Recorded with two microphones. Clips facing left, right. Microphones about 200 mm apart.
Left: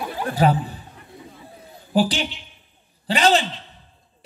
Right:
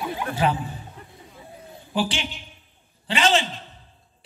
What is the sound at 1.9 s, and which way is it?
Speech, 40° left (ahead or behind).